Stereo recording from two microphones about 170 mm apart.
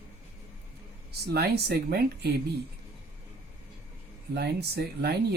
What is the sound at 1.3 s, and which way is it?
Speech, 70° right (ahead or behind).